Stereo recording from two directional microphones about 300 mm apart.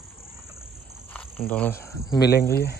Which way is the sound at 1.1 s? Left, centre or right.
Centre.